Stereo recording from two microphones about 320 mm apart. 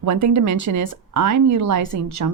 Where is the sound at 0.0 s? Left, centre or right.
Right.